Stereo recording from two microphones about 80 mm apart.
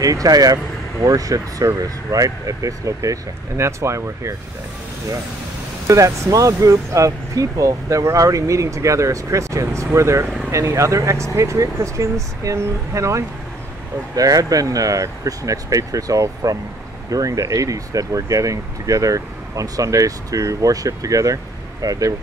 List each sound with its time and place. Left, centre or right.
0.0 s speech: right
5.9 s speech: right